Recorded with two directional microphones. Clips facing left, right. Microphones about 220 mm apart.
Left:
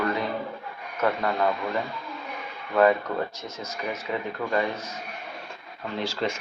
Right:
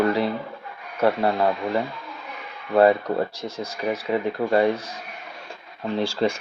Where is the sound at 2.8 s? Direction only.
35° right (ahead or behind).